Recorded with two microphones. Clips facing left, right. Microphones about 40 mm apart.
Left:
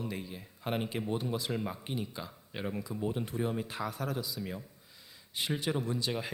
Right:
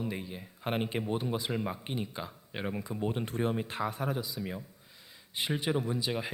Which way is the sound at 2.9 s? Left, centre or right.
Right.